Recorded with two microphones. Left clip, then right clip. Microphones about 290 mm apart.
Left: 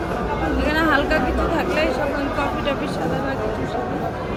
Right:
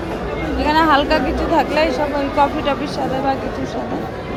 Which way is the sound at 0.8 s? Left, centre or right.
Centre.